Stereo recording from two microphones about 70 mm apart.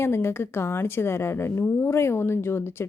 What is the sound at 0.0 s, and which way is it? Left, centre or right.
A woman's voice, left.